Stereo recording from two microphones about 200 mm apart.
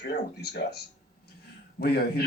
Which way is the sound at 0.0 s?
55° left (ahead or behind).